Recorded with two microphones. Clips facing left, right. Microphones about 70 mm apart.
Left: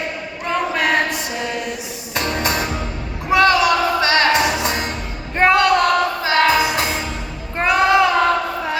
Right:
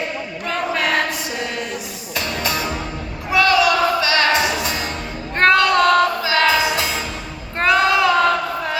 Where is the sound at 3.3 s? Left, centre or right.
Left.